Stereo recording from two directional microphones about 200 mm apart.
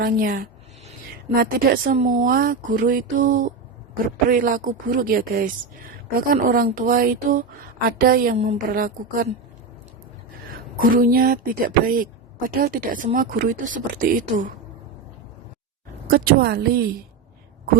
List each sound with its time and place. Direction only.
0.0 s a woman's voice: 45° right (ahead or behind)
10.8 s a woman's voice: 45° right (ahead or behind)
16.0 s a woman's voice: 45° right (ahead or behind)